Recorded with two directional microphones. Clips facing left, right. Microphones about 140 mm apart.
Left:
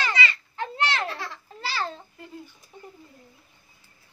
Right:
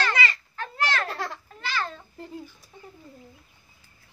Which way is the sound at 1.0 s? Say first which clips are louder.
Right 1 dB; 45° right (ahead or behind).